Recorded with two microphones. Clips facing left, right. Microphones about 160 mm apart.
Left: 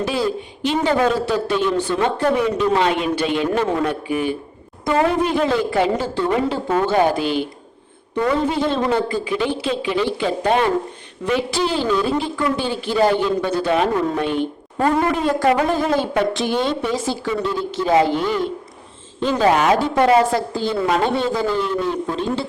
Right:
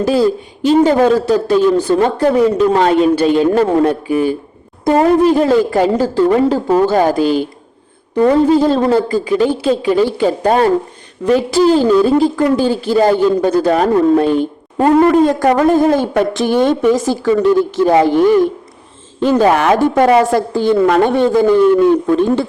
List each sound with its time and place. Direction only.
0.0 s a woman's voice: 40° right (ahead or behind)